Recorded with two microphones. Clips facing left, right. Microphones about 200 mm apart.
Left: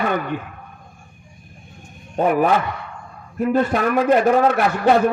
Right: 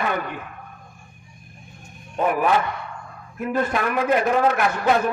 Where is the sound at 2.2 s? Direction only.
35° left (ahead or behind).